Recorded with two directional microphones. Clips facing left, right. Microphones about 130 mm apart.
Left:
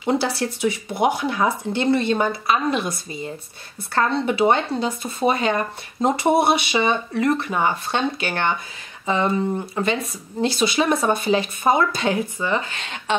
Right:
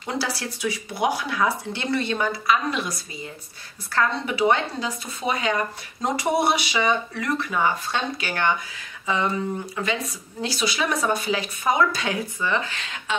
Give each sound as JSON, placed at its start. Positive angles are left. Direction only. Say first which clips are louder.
{"t": 0.1, "sound": "speech", "louder": "left 7 dB", "side_deg": 25}